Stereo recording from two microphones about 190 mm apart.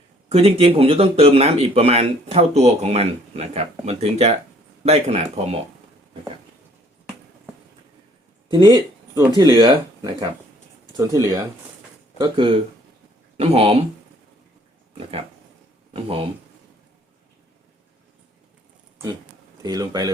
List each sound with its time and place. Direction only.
0.3 s speech: 30° right (ahead or behind)
8.4 s speech: 25° right (ahead or behind)
15.9 s speech: 30° right (ahead or behind)
19.6 s speech: 20° right (ahead or behind)